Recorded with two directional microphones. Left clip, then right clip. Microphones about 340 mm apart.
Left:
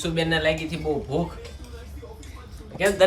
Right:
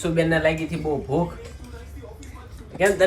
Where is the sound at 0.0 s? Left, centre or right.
Centre.